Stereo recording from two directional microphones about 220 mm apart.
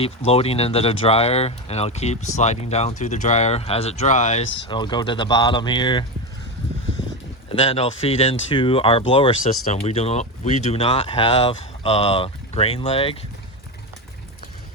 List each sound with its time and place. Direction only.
0.3 s speech: 25° left (ahead or behind)
4.7 s speech: 20° left (ahead or behind)
7.5 s speech: 25° left (ahead or behind)